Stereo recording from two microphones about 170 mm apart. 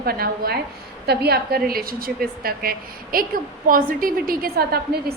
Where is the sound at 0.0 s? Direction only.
65° right (ahead or behind).